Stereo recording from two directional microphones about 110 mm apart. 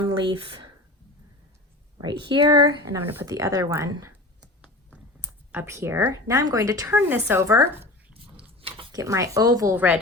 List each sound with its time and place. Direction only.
0.1 s speech: 45° right (ahead or behind)
2.0 s speech: 40° right (ahead or behind)
3.0 s speech: 20° right (ahead or behind)
3.2 s speech: 35° right (ahead or behind)
5.5 s speech: 20° right (ahead or behind)
6.9 s speech: 15° right (ahead or behind)
8.9 s speech: 30° right (ahead or behind)
9.7 s a woman's voice: 15° right (ahead or behind)